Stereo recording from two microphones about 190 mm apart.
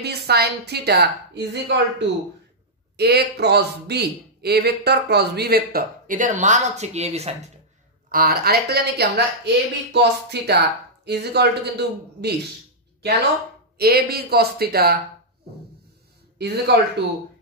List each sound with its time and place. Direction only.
0.0 s a man's voice: 60° right (ahead or behind); by 7.3 s 35° right (ahead or behind)
8.1 s a man's voice: 50° right (ahead or behind)
13.7 s a man's voice: 55° right (ahead or behind)
16.3 s a man's voice: 60° right (ahead or behind)